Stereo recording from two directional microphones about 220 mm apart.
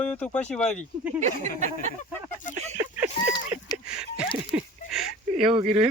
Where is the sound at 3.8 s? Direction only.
5° right (ahead or behind).